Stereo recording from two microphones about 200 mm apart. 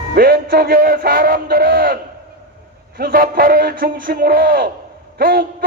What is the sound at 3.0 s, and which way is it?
Music, 45° right (ahead or behind).